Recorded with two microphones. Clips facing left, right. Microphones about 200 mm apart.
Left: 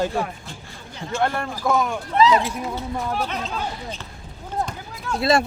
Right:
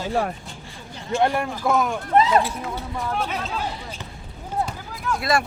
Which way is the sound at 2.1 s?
55° right (ahead or behind).